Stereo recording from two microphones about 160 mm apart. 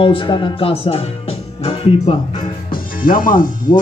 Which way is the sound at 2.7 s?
60° left (ahead or behind).